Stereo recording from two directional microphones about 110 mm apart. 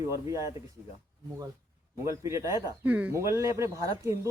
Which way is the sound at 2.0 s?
30° right (ahead or behind).